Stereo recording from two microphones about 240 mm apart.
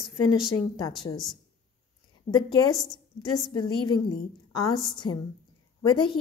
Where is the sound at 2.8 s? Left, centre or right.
Centre.